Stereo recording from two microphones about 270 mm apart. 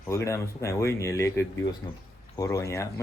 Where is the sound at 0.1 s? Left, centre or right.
Centre.